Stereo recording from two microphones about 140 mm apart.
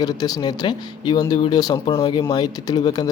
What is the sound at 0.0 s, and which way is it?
A man's voice, 25° left (ahead or behind).